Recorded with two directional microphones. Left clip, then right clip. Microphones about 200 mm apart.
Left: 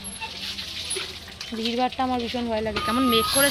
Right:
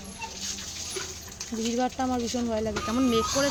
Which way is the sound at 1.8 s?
15° right (ahead or behind).